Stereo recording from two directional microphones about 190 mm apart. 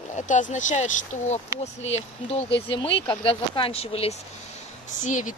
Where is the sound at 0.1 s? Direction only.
40° left (ahead or behind).